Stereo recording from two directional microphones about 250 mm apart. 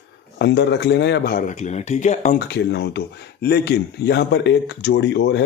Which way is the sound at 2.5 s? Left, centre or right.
Left.